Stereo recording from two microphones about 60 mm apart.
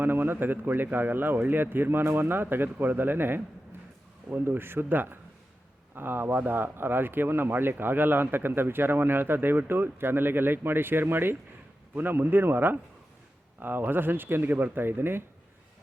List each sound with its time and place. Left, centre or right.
0.0 s speech: right